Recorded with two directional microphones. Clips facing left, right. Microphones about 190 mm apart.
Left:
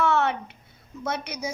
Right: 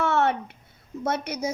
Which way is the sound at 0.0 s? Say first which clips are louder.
Even; 45° right (ahead or behind).